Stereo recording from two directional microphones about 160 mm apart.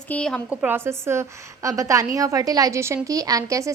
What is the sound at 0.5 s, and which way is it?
A woman's voice, 10° right (ahead or behind).